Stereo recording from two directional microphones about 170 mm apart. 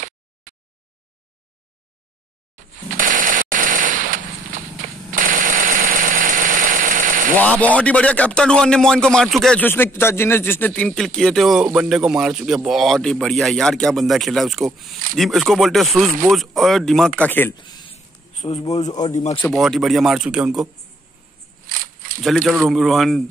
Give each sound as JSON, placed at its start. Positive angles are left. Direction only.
{"t": 3.0, "sound": "machine gun", "side_deg": -50}
{"t": 7.3, "sound": "speech", "side_deg": 10}
{"t": 17.6, "sound": "a sound", "side_deg": 25}
{"t": 18.5, "sound": "a man's voice", "side_deg": 40}
{"t": 19.4, "sound": "speech", "side_deg": 0}
{"t": 21.6, "sound": "a sound", "side_deg": -55}
{"t": 22.2, "sound": "speech", "side_deg": 0}